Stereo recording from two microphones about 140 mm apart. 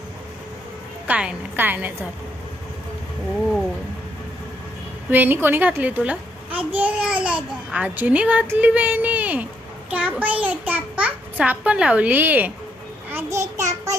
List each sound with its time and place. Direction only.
1.0 s a child's voice: 10° right (ahead or behind)
5.1 s a child's voice: 15° right (ahead or behind)
13.1 s a sound: 20° right (ahead or behind)